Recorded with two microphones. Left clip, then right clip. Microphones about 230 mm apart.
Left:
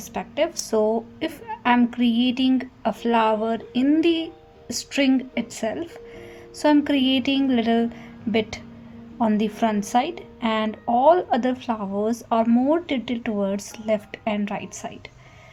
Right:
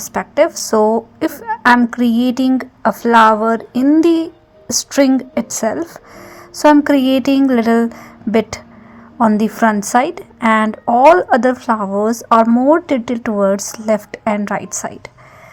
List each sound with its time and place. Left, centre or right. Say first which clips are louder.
0.0 s a woman's voice: right 10 dB; right